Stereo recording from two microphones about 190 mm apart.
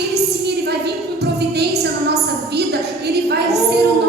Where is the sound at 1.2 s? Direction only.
60° right (ahead or behind).